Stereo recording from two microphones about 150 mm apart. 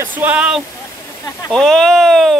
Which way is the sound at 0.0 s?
10° right (ahead or behind).